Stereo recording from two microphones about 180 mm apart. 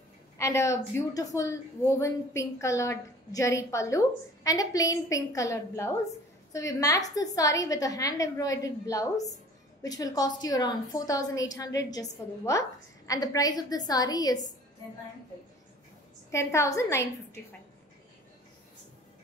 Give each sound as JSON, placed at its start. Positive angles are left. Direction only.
{"t": 0.4, "sound": "a woman's voice", "side_deg": 15}
{"t": 16.3, "sound": "a woman's voice", "side_deg": 15}